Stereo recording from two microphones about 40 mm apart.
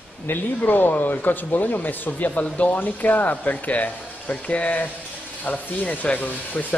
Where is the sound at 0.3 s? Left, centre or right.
Left.